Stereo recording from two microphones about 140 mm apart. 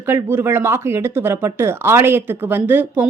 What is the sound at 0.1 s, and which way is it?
Speech, 15° right (ahead or behind).